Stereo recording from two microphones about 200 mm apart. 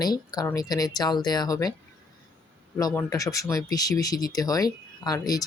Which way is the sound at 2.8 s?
15° left (ahead or behind).